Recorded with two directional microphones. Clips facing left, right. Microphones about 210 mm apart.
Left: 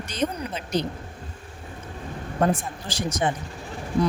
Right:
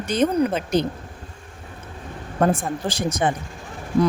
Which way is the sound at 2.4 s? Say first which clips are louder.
Right 4 dB; 55° right (ahead or behind).